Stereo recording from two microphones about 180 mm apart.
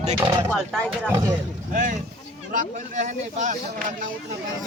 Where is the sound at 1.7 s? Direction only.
45° right (ahead or behind).